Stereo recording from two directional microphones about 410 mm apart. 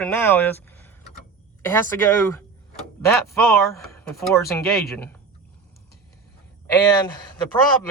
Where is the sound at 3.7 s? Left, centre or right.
Centre.